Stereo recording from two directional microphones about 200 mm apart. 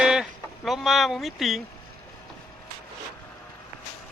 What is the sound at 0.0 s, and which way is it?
Speech, 5° right (ahead or behind).